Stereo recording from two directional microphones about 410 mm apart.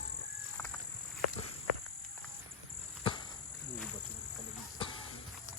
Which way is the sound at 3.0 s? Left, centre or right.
Centre.